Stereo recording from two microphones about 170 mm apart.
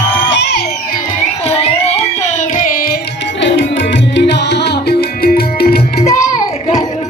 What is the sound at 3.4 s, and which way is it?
Music, 90° left.